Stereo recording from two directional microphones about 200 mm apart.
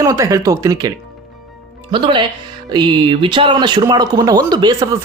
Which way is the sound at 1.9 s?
25° right (ahead or behind).